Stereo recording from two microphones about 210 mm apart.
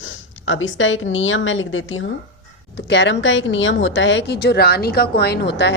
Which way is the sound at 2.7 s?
55° left (ahead or behind).